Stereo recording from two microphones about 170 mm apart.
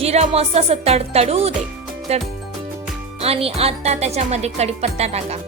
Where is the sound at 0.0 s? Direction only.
40° right (ahead or behind).